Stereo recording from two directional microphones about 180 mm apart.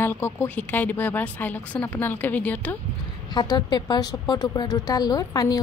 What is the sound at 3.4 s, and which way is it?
Speech, 25° left (ahead or behind).